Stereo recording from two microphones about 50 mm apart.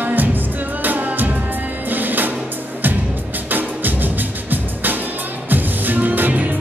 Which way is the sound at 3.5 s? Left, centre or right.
Right.